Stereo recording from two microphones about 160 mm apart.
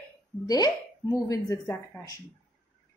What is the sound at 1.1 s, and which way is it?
Speech, 20° left (ahead or behind).